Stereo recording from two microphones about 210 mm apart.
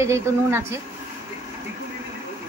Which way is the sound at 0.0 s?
15° right (ahead or behind).